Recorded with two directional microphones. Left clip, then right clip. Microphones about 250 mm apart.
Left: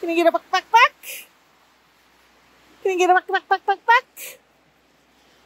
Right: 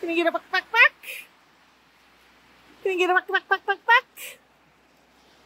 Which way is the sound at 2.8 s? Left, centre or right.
Left.